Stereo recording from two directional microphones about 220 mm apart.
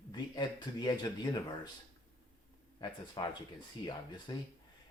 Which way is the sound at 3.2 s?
20° left (ahead or behind).